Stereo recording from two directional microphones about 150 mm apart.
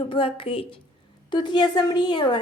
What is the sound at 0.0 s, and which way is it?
A woman's voice, 35° left (ahead or behind).